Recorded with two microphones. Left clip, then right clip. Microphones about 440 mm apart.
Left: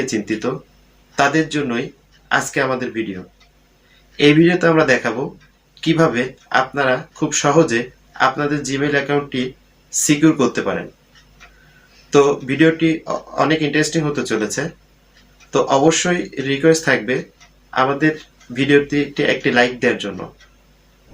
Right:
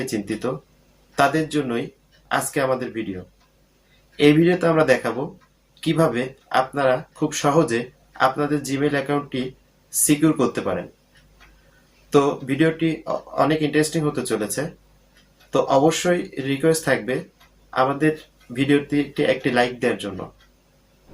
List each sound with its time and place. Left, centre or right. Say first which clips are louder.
0.0 s speech: left 5 dB; right
4.2 s speech: left 4 dB; right
12.1 s speech: left 5 dB; right